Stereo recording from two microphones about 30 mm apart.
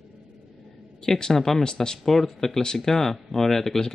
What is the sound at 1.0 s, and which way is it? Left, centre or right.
Speech, centre.